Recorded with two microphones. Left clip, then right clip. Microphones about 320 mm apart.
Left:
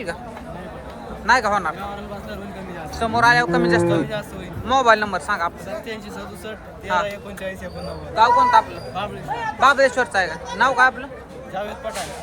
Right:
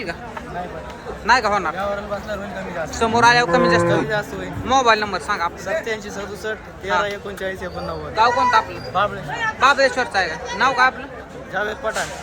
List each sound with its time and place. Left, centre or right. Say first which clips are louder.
1.3 s speech: right 1 dB; centre
3.0 s speech: right 2 dB; centre